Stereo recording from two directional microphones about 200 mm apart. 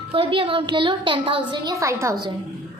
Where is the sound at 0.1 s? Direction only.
25° right (ahead or behind).